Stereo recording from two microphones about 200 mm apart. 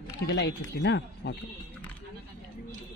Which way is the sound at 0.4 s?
55° left (ahead or behind).